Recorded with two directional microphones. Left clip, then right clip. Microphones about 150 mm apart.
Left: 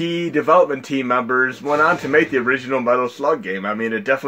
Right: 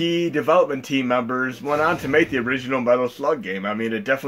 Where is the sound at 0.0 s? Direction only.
50° left (ahead or behind).